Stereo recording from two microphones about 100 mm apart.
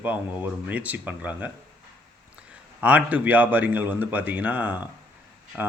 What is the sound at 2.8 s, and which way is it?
A man's voice, 15° right (ahead or behind).